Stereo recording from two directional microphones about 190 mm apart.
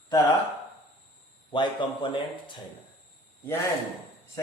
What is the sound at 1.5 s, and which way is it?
Speech, 25° left (ahead or behind).